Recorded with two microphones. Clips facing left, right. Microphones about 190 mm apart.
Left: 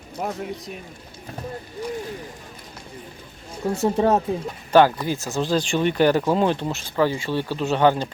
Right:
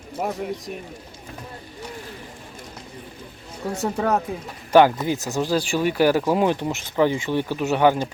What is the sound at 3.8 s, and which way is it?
Speech, 25° left (ahead or behind).